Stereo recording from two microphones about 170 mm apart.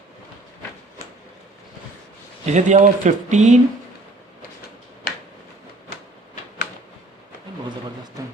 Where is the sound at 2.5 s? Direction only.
45° right (ahead or behind).